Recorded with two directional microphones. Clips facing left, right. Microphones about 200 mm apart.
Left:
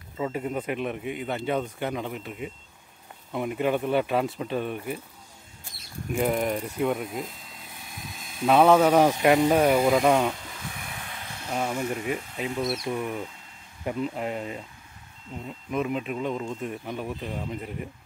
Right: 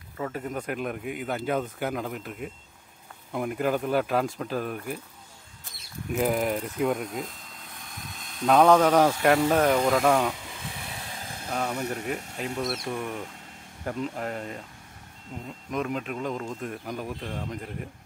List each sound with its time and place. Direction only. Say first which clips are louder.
0.2 s speech: left 3 dB; 10° left (ahead or behind)
6.1 s speech: even; centre (ahead or behind)
10.5 s vehicle: even; 25° right (ahead or behind)
11.5 s speech: left 2 dB; 5° left (ahead or behind)